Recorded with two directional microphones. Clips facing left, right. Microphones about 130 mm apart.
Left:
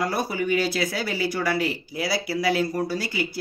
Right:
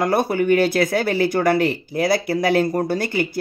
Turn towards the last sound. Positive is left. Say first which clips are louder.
# right 5 dB
turn(degrees=-55)  # may be behind; listen again after turning